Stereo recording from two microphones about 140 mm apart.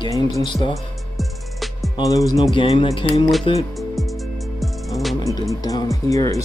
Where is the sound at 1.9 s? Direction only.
25° left (ahead or behind).